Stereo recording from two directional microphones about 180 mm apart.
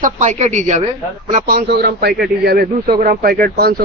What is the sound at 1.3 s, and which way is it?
A man's voice, 55° right (ahead or behind).